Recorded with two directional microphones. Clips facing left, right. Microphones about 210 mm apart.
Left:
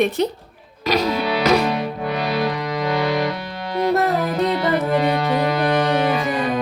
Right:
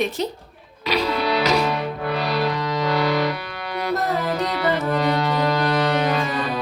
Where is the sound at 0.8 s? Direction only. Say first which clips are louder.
Left 3 dB; 45° left (ahead or behind).